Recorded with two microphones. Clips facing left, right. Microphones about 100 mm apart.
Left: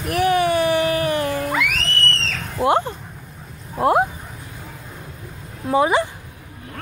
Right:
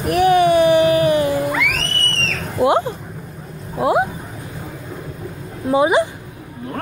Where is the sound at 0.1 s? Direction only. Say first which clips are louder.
Right 5 dB; 20° right (ahead or behind).